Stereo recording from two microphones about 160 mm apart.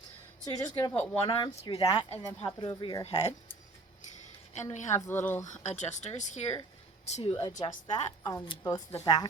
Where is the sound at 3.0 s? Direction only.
40° left (ahead or behind).